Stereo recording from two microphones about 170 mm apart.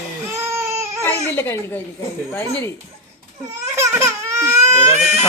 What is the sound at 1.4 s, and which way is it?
Speech, 15° left (ahead or behind).